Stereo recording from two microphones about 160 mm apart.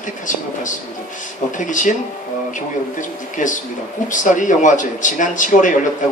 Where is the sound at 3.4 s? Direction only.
55° left (ahead or behind).